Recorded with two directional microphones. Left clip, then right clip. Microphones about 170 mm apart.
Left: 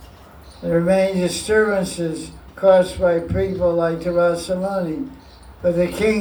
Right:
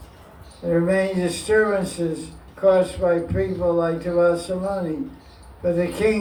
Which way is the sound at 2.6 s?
45° left (ahead or behind).